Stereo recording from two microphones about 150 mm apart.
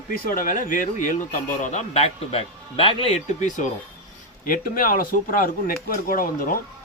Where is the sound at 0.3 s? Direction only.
65° left (ahead or behind).